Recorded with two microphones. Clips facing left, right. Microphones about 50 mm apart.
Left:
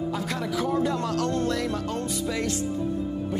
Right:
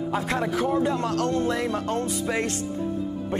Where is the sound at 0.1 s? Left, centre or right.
Right.